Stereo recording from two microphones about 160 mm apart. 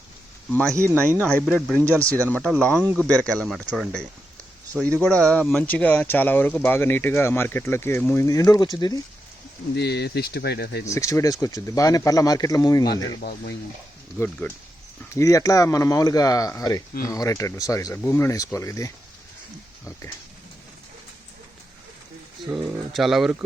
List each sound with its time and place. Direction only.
1.2 s speech: 5° left (ahead or behind)
2.0 s speech: 20° right (ahead or behind)
2.3 s speech: 5° left (ahead or behind); by 9.0 s 25° left (ahead or behind)
9.7 s speech: 90° left
10.8 s speech: 20° left (ahead or behind)
12.9 s speech: 85° left
14.2 s speech: 10° left (ahead or behind)
22.4 s speech: centre (ahead or behind)